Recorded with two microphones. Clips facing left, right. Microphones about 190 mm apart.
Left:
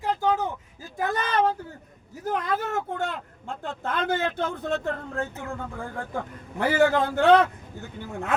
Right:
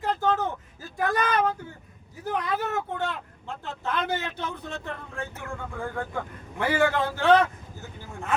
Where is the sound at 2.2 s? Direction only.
45° left (ahead or behind).